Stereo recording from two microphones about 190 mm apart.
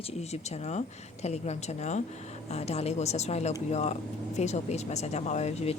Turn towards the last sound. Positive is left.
turn(degrees=35)  # may be behind; listen again after turning